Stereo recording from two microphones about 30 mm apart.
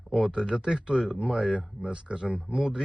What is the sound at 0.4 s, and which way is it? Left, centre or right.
Speech, right.